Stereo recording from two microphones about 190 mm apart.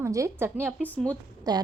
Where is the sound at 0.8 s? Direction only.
10° left (ahead or behind).